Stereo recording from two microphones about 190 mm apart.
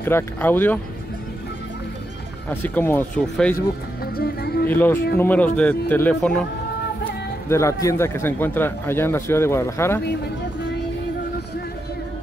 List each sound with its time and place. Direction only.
0.0 s speech: 10° left (ahead or behind)
2.5 s speech: 10° left (ahead or behind)
3.5 s speech: 55° left (ahead or behind)
4.6 s speech: 10° left (ahead or behind)
7.4 s speech: 15° left (ahead or behind)